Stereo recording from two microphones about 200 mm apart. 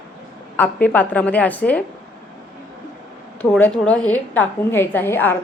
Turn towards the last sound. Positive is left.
turn(degrees=10)  # may be behind; listen again after turning